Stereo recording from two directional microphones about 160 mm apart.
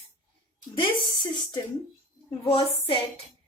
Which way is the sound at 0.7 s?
30° left (ahead or behind).